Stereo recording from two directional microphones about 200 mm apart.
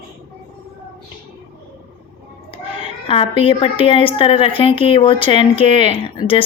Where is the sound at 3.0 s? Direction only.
25° left (ahead or behind).